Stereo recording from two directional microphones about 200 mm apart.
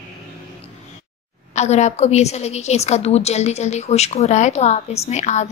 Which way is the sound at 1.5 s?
35° left (ahead or behind).